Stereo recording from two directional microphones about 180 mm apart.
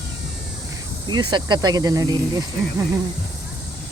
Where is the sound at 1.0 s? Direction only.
25° right (ahead or behind).